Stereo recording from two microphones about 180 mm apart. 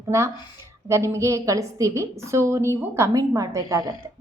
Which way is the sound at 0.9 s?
15° right (ahead or behind).